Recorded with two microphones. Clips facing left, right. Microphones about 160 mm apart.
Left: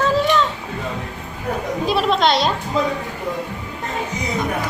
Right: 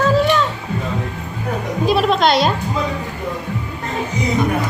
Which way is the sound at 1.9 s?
Centre (ahead or behind).